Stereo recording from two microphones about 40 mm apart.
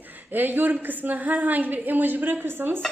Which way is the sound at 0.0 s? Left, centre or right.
Right.